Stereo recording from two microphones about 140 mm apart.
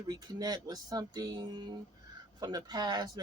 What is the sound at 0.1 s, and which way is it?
Speech, 30° right (ahead or behind).